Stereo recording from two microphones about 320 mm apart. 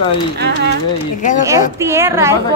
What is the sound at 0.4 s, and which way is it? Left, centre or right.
Speech, right.